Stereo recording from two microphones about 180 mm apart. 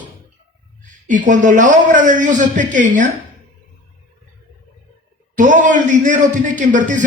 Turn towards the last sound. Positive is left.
turn(degrees=-45)  # may be behind; listen again after turning